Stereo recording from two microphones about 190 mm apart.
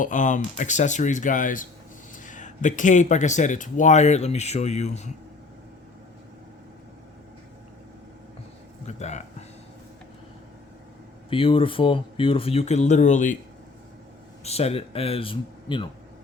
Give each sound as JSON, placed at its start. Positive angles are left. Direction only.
{"t": 0.0, "sound": "speech", "side_deg": 40}
{"t": 8.9, "sound": "speech", "side_deg": 35}
{"t": 11.3, "sound": "speech", "side_deg": 30}
{"t": 14.4, "sound": "speech", "side_deg": 35}